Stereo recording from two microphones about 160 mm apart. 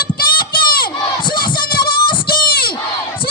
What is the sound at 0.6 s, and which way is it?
Crowd, 65° left (ahead or behind).